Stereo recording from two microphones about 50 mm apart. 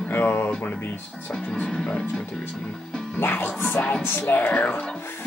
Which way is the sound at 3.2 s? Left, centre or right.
Left.